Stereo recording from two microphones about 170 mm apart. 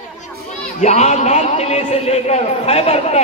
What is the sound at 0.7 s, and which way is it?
A man's voice, 40° left (ahead or behind).